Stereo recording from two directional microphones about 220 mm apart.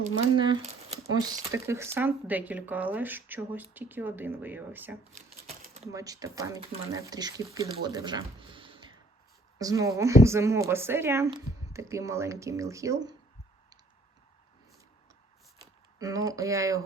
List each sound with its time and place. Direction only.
0.3 s speech: 25° right (ahead or behind); by 4.9 s 10° right (ahead or behind)
5.6 s a sound: 30° right (ahead or behind)
5.9 s speech: 15° right (ahead or behind)
15.5 s speech: 15° right (ahead or behind)